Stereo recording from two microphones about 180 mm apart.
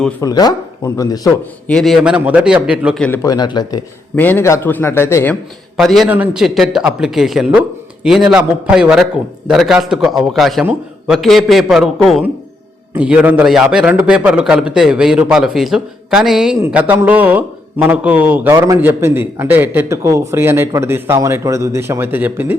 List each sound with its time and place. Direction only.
0.2 s speech: 20° left (ahead or behind)
1.6 s a man's voice: centre (ahead or behind)
3.2 s speech: 20° left (ahead or behind)
4.1 s a man's voice: 10° left (ahead or behind)
5.7 s a man's voice: centre (ahead or behind)